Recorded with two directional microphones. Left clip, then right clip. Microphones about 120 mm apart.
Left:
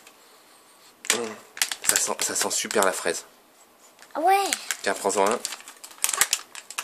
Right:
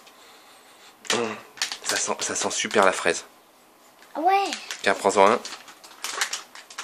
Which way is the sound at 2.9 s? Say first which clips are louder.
Right 4 dB; 10° left (ahead or behind).